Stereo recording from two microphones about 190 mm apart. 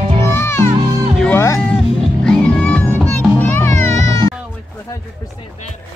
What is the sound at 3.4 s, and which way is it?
Music, 10° left (ahead or behind).